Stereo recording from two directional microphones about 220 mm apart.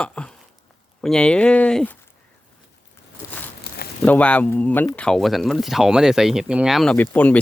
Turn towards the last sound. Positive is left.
turn(degrees=5)  # may be behind; listen again after turning